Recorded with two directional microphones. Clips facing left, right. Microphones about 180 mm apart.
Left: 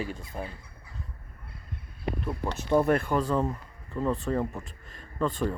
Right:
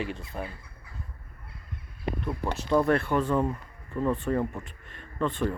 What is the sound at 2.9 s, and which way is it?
Speech, centre (ahead or behind).